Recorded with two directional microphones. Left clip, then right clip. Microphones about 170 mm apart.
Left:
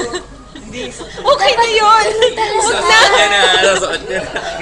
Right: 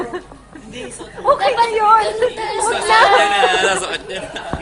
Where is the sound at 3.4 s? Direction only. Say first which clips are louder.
Left 4 dB; 50° right (ahead or behind).